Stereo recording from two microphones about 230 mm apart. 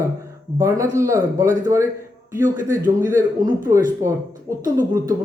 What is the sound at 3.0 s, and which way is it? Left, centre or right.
Speech, centre.